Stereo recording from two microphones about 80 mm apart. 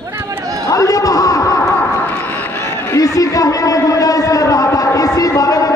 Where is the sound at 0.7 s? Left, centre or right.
Left.